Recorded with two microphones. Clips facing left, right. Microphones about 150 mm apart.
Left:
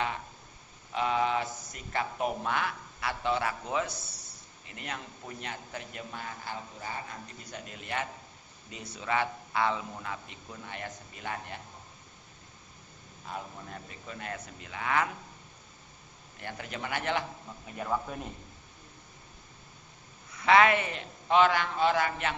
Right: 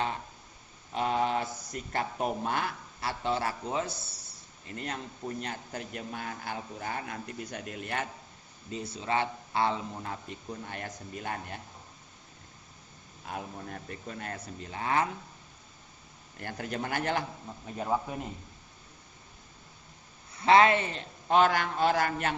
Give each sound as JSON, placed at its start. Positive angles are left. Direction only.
{"t": 0.9, "sound": "a man's voice", "side_deg": -40}
{"t": 8.7, "sound": "speech", "side_deg": -30}
{"t": 14.1, "sound": "speech", "side_deg": -40}
{"t": 16.4, "sound": "a man's voice", "side_deg": -45}
{"t": 17.7, "sound": "a man's voice", "side_deg": -25}
{"t": 20.3, "sound": "a man's voice", "side_deg": -30}